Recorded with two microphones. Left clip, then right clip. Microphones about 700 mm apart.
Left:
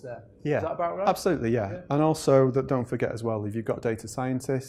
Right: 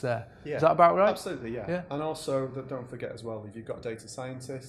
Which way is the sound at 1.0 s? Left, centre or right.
Left.